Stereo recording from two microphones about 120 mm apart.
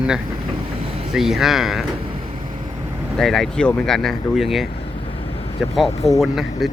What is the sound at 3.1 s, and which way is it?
Speech, 5° left (ahead or behind).